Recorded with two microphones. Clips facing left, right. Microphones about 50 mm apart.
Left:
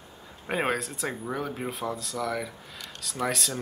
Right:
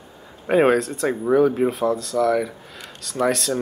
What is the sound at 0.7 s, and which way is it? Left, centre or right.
Speech, centre.